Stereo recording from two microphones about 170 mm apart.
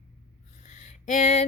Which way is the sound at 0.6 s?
45° left (ahead or behind).